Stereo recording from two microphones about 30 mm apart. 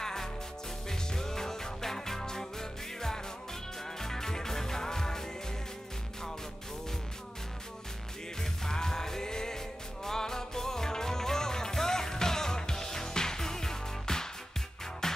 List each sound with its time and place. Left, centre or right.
0.0 s music: centre
4.0 s music: centre
8.4 s music: centre